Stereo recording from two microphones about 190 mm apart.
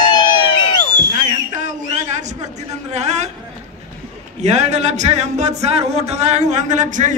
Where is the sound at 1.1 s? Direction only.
40° right (ahead or behind).